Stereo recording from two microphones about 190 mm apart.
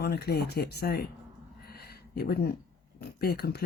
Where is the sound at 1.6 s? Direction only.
55° left (ahead or behind).